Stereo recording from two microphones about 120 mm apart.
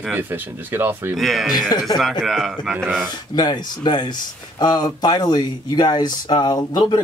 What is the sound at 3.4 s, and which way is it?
Speech, 35° left (ahead or behind).